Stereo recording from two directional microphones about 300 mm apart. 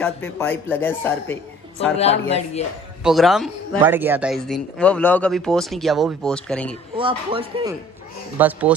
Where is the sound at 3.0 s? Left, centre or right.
Centre.